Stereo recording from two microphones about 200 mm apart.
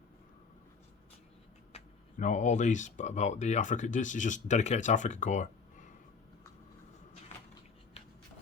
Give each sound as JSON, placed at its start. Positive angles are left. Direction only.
{"t": 1.7, "sound": "speech", "side_deg": 40}